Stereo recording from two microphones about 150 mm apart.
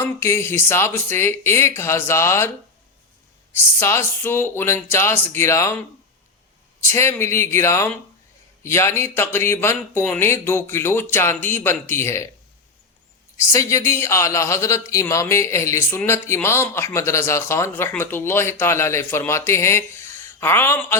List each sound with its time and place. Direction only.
0.0 s a man's voice: 20° left (ahead or behind)
3.5 s a man's voice: 15° left (ahead or behind)
6.8 s a man's voice: 15° left (ahead or behind)
13.3 s a man's voice: 20° left (ahead or behind)